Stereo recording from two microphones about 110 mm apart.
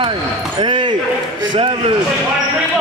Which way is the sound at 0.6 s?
50° right (ahead or behind).